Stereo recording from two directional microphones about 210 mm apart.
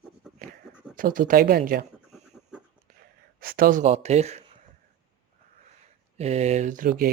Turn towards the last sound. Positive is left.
turn(degrees=-40)  # may be behind; listen again after turning